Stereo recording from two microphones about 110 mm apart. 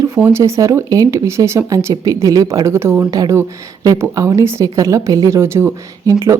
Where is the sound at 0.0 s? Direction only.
25° right (ahead or behind).